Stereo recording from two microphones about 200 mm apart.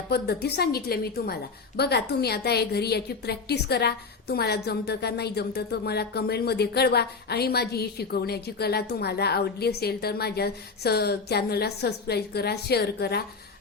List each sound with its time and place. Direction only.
0.1 s a woman's voice: 55° left (ahead or behind)